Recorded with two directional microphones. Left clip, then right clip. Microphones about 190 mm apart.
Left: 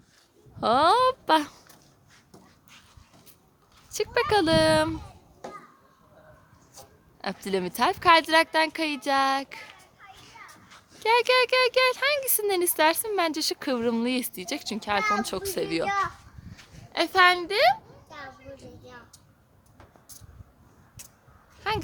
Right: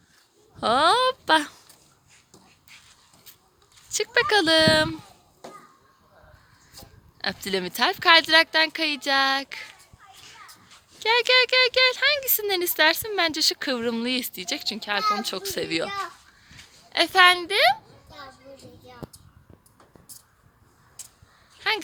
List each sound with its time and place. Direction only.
0.6 s speech: centre (ahead or behind)
2.3 s a sound: centre (ahead or behind)
3.8 s speech: centre (ahead or behind)
6.7 s speech: centre (ahead or behind); by 17.7 s 15° right (ahead or behind)
18.5 s a sound: 15° right (ahead or behind)
21.7 s speech: centre (ahead or behind)